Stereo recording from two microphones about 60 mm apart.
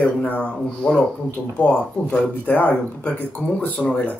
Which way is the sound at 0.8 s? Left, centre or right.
Centre.